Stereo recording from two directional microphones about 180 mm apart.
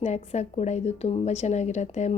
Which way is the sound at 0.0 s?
40° left (ahead or behind).